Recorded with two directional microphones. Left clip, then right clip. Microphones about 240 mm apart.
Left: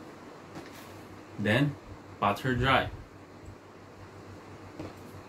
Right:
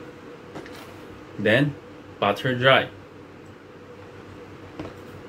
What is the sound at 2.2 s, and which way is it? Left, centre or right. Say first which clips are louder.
Speech: right 7 dB; centre.